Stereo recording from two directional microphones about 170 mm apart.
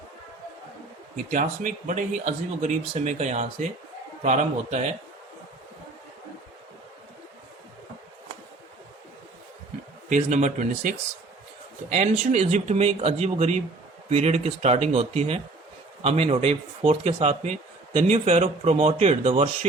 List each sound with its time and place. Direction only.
1.1 s speech: 50° right (ahead or behind)
10.1 s a man's voice: 45° right (ahead or behind)